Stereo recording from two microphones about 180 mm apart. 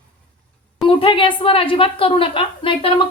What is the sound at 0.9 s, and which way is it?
A woman's voice, 30° left (ahead or behind).